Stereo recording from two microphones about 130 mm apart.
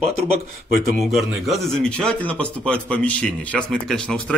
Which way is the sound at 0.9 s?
Centre (ahead or behind).